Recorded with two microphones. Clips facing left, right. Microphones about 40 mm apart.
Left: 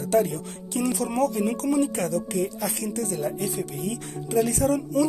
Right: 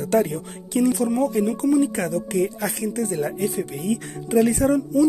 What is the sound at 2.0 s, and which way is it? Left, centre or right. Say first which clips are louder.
Speech: right 3 dB; right.